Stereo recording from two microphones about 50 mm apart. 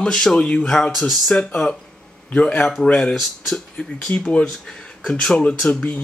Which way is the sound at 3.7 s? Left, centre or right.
Centre.